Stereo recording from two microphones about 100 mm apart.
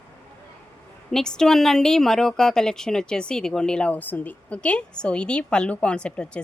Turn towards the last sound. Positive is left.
turn(degrees=10)  # may be behind; listen again after turning